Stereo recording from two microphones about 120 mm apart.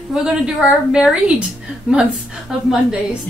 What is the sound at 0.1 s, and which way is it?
A woman's voice, 5° right (ahead or behind).